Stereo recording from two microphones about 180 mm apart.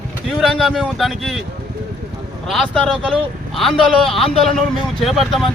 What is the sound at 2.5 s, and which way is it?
A man's voice, 5° left (ahead or behind).